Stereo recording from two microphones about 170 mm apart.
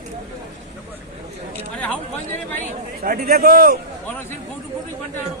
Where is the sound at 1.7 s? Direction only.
5° left (ahead or behind).